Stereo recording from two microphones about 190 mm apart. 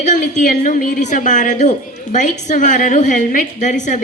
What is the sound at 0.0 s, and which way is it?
A woman's voice, 40° left (ahead or behind).